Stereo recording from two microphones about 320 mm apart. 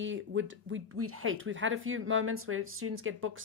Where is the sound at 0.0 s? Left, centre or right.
Right.